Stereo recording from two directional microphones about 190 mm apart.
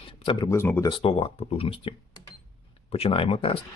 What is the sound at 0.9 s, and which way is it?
Speech, 30° left (ahead or behind).